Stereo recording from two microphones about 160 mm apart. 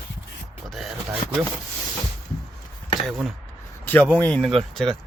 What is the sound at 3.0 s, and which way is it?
Speech, centre (ahead or behind).